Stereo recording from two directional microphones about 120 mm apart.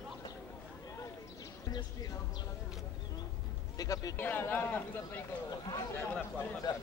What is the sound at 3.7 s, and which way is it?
Speech, 30° left (ahead or behind).